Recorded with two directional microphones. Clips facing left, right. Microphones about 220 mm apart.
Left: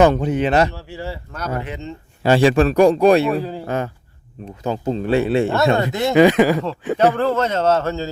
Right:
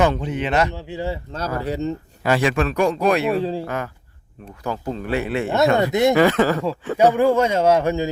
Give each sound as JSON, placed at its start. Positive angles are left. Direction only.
{"t": 0.0, "sound": "a man's voice", "side_deg": 45}
{"t": 0.7, "sound": "speech", "side_deg": -20}
{"t": 1.6, "sound": "speech", "side_deg": -35}
{"t": 2.2, "sound": "a man's voice", "side_deg": 30}
{"t": 3.3, "sound": "speech", "side_deg": -30}
{"t": 3.7, "sound": "speech", "side_deg": 25}
{"t": 5.7, "sound": "speech", "side_deg": -20}
{"t": 6.1, "sound": "speech", "side_deg": 15}
{"t": 6.9, "sound": "a man's voice", "side_deg": -10}